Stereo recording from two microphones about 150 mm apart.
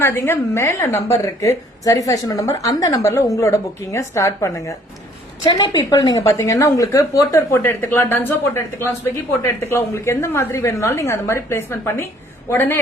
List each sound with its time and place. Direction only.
0.0 s a woman's voice: 15° left (ahead or behind)